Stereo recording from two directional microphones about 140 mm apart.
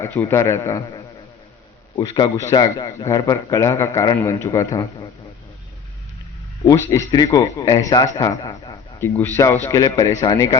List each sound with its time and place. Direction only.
0.0 s a man's voice: 15° left (ahead or behind)
2.0 s a man's voice: 30° left (ahead or behind)
7.1 s a man's voice: 25° left (ahead or behind)
9.0 s a man's voice: 15° left (ahead or behind)